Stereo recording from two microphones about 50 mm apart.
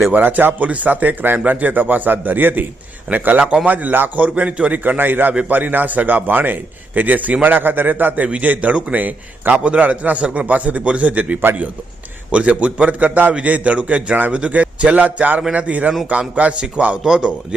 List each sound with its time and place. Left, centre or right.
0.1 s a man's voice: right
4.8 s a man's voice: right
17.0 s a man's voice: centre